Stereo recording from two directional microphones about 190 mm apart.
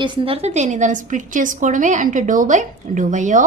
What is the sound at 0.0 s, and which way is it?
A woman's voice, 25° right (ahead or behind).